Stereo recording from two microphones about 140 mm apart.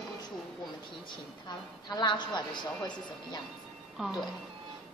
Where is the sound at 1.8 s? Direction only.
30° left (ahead or behind).